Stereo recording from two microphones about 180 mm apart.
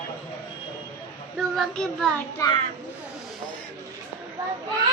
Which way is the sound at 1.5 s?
Centre (ahead or behind).